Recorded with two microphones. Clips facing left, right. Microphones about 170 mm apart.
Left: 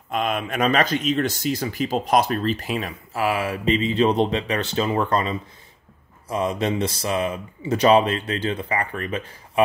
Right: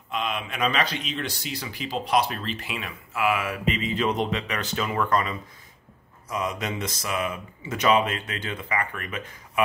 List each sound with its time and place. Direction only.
0.1 s speech: 50° left (ahead or behind); by 9.3 s 30° left (ahead or behind)